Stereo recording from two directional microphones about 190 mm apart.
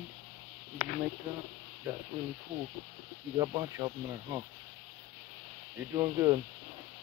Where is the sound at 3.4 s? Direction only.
15° right (ahead or behind).